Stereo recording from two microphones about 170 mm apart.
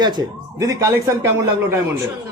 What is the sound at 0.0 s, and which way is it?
Speech, 25° right (ahead or behind).